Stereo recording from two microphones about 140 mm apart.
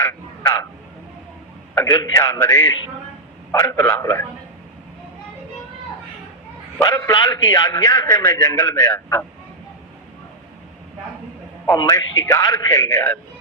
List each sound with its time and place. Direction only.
0.0 s a sound: 20° left (ahead or behind)
1.9 s a man's voice: 25° left (ahead or behind)
6.7 s a man's voice: 20° left (ahead or behind)
11.7 s a man's voice: 25° left (ahead or behind)